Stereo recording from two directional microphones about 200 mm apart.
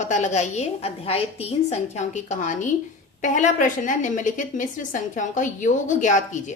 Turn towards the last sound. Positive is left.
turn(degrees=40)  # may be behind; listen again after turning